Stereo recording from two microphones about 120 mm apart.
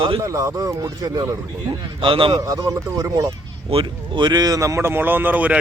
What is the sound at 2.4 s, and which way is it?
Speech, 30° right (ahead or behind).